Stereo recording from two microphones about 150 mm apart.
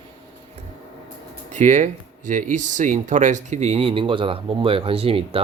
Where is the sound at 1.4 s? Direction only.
55° right (ahead or behind); by 5.4 s 40° right (ahead or behind).